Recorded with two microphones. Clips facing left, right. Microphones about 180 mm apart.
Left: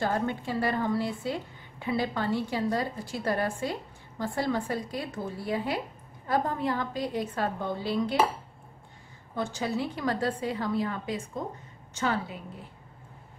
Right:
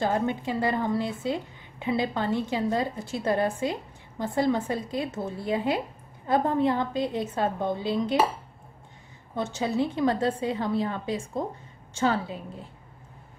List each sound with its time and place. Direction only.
0.0 s a woman's voice: 20° right (ahead or behind)
9.3 s a woman's voice: 20° right (ahead or behind)